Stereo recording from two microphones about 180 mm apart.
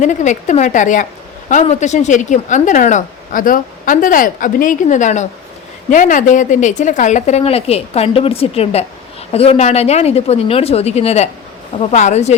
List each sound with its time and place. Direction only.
0.0 s speech: 45° left (ahead or behind)